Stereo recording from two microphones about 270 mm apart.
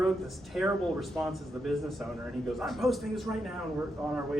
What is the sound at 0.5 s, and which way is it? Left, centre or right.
Speech, centre.